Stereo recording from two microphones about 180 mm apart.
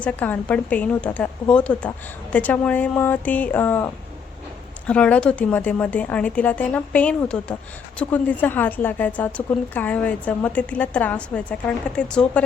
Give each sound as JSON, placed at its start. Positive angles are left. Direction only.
{"t": 0.0, "sound": "a woman's voice", "side_deg": 10}